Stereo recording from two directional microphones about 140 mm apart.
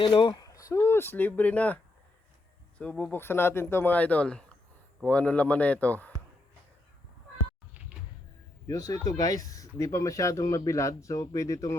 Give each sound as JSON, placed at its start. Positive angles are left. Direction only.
{"t": 0.0, "sound": "speech", "side_deg": 35}
{"t": 8.6, "sound": "speech", "side_deg": 25}